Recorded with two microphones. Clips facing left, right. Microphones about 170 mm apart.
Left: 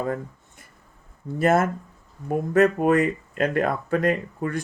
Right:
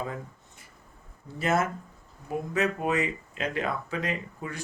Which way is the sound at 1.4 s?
55° left (ahead or behind).